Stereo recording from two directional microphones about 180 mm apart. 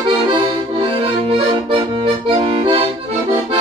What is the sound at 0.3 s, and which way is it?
Accordion, 30° right (ahead or behind).